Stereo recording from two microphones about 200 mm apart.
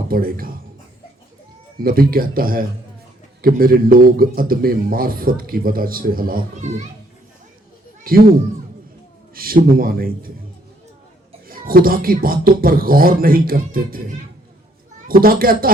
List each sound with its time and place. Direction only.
0.1 s a man's voice: 45° right (ahead or behind)
1.8 s a man's voice: 45° right (ahead or behind)
8.0 s speech: 45° right (ahead or behind)
9.3 s a man's voice: 45° right (ahead or behind)
11.4 s a man's voice: 45° right (ahead or behind)
15.0 s a man's voice: 45° right (ahead or behind)